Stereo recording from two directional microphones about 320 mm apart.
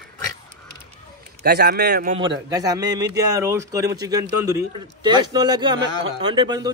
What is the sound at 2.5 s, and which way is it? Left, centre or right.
Speech, centre.